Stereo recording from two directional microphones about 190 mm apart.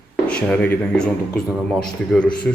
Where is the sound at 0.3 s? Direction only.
5° left (ahead or behind).